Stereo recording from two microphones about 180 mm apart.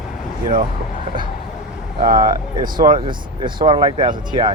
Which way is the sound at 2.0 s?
50° right (ahead or behind).